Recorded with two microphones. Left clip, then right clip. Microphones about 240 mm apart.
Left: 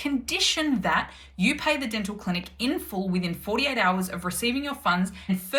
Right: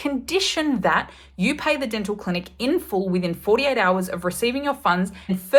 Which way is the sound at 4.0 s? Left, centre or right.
Centre.